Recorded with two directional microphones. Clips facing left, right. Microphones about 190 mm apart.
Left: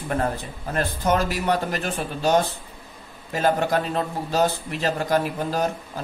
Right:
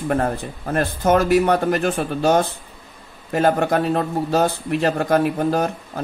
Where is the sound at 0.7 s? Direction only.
55° right (ahead or behind).